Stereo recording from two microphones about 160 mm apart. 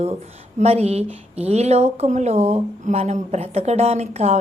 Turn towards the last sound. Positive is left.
turn(degrees=-40)  # may be behind; listen again after turning